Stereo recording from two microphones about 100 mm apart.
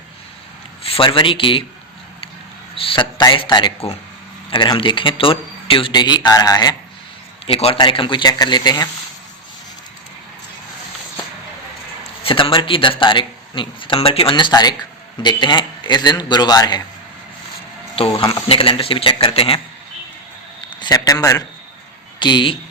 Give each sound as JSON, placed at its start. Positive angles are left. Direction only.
{"t": 0.9, "sound": "speech", "side_deg": 65}
{"t": 2.7, "sound": "speech", "side_deg": 60}
{"t": 7.4, "sound": "a man's voice", "side_deg": 85}
{"t": 7.8, "sound": "speech", "side_deg": 60}
{"t": 8.3, "sound": "speech", "side_deg": 45}
{"t": 12.2, "sound": "speech", "side_deg": 60}
{"t": 17.9, "sound": "speech", "side_deg": 70}
{"t": 20.7, "sound": "a sound", "side_deg": 45}
{"t": 22.2, "sound": "speech", "side_deg": 50}